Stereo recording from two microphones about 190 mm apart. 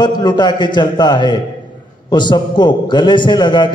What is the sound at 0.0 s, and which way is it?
Mantra, 20° left (ahead or behind).